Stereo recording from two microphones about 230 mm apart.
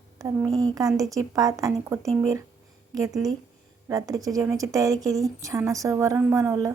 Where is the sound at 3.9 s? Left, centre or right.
Centre.